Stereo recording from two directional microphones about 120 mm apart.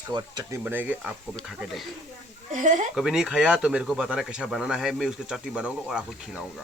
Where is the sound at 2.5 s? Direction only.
90° right.